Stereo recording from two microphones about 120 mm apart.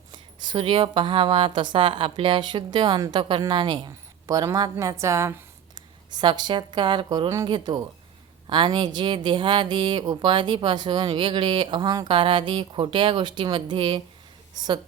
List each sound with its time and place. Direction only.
0.1 s a woman's voice: 45° right (ahead or behind); by 5.3 s 25° right (ahead or behind)
6.1 s speech: 35° right (ahead or behind)